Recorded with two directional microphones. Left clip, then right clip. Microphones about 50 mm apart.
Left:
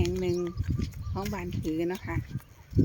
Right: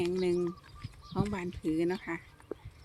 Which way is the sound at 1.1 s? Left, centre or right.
Left.